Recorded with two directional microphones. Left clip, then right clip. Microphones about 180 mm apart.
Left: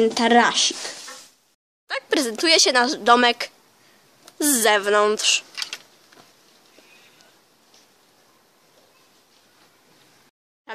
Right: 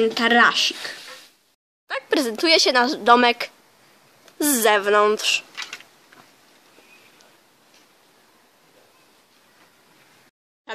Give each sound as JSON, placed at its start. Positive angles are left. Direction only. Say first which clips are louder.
{"t": 0.0, "sound": "speech", "louder": "even", "side_deg": 0}
{"t": 1.9, "sound": "speech", "louder": "even", "side_deg": 0}
{"t": 5.5, "sound": "mechanisms", "louder": "left 2 dB", "side_deg": 50}